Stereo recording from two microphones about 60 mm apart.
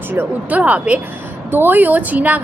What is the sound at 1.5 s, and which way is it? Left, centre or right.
Speech, right.